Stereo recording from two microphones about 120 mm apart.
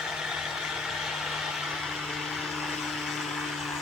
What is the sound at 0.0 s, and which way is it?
Vehicle, 5° right (ahead or behind).